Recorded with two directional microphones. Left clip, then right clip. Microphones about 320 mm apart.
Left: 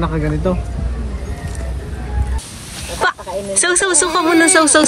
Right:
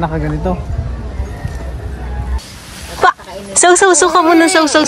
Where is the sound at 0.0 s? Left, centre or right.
Right.